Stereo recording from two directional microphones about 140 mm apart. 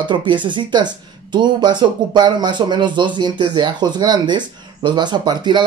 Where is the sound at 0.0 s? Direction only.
35° right (ahead or behind).